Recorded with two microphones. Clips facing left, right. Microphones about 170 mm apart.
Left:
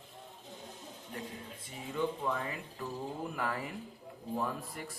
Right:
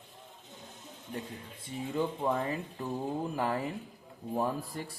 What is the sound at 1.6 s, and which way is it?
A man's voice, 30° right (ahead or behind).